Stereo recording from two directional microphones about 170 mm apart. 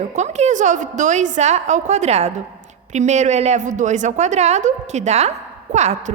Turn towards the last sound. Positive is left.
turn(degrees=-40)  # may be behind; listen again after turning